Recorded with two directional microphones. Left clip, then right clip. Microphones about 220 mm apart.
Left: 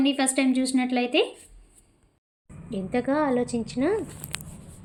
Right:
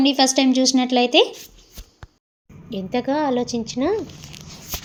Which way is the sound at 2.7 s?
20° right (ahead or behind).